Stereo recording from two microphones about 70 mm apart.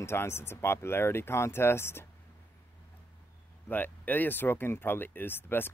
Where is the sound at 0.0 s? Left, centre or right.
Left.